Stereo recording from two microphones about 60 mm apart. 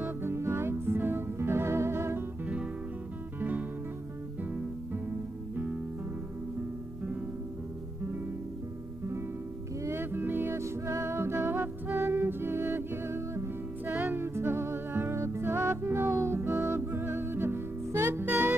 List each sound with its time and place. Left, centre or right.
0.0 s music: right
2.4 s music: centre
9.8 s music: right
10.5 s music: right
12.1 s music: right
13.8 s music: right
14.1 s music: right
15.1 s music: right
15.4 s music: right
18.2 s music: right